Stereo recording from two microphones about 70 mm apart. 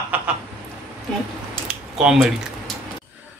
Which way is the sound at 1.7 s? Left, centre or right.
Centre.